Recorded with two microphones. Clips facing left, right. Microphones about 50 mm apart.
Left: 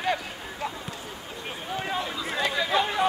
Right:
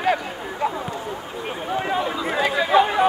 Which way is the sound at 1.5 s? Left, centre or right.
Centre.